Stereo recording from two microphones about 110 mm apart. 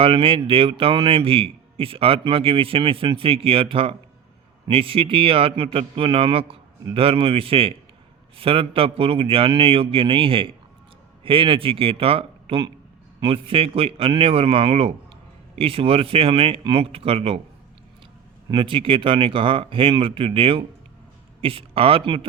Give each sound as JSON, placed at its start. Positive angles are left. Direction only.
{"t": 0.0, "sound": "a man's voice", "side_deg": -55}
{"t": 18.5, "sound": "a man's voice", "side_deg": -50}